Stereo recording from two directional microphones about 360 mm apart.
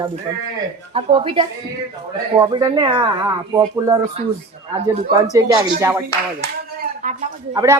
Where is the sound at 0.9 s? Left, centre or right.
Centre.